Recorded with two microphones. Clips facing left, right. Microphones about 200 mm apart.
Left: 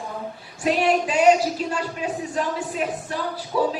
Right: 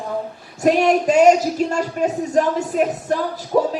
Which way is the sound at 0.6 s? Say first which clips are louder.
Right 5 dB; 45° right (ahead or behind).